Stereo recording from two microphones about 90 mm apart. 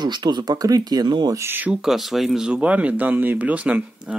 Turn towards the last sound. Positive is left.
turn(degrees=-15)  # may be behind; listen again after turning